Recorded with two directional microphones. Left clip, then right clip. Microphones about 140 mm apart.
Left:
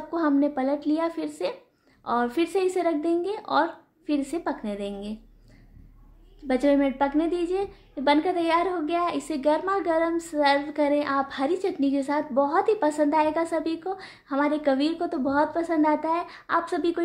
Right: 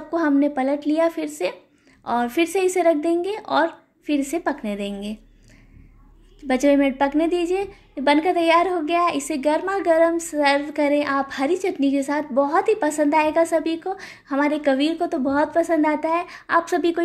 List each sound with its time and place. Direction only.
0.1 s a woman's voice: 15° right (ahead or behind)
6.4 s a woman's voice: 15° right (ahead or behind)